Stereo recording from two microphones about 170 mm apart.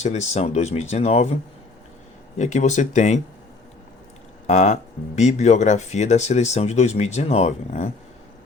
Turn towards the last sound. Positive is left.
turn(degrees=40)  # may be behind; listen again after turning